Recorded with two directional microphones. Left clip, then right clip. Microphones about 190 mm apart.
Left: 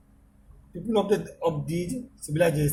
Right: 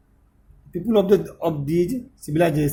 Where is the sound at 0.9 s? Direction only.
50° right (ahead or behind).